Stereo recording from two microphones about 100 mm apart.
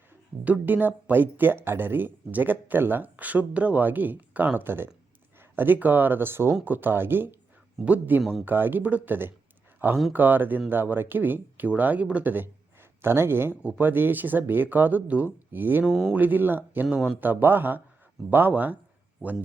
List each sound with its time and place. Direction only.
0.4 s speech: 15° right (ahead or behind)
8.2 s speech: centre (ahead or behind)
8.4 s speech: 20° right (ahead or behind)
15.9 s speech: 5° right (ahead or behind)
16.1 s speech: 15° right (ahead or behind)